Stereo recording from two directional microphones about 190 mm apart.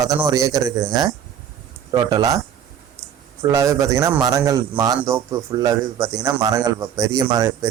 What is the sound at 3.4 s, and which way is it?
A man's voice, 15° right (ahead or behind).